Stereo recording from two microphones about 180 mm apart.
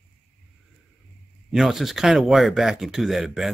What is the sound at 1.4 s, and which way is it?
Speech, centre (ahead or behind).